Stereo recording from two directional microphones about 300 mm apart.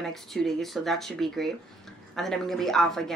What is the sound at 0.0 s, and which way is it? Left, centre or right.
A woman's voice, centre.